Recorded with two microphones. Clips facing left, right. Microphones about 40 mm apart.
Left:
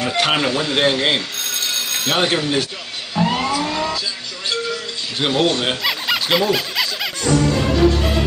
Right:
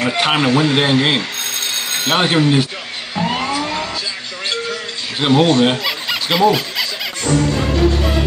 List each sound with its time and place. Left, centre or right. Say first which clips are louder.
0.1 s speech: right 2 dB; centre
0.5 s speech: right 6 dB; right
0.7 s telephone bell ringing: right 2 dB; centre
2.1 s speech: right 5 dB; centre
5.2 s speech: right 5 dB; centre